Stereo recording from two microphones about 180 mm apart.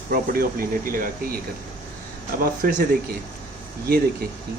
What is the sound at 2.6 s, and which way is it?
Speech, 55° right (ahead or behind).